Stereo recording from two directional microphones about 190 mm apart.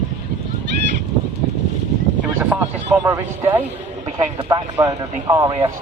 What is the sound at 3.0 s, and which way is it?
Speech, 15° right (ahead or behind).